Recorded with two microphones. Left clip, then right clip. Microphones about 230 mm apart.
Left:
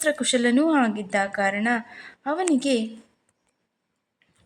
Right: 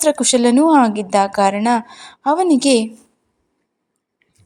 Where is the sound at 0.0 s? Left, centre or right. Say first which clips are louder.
Right 8 dB; centre.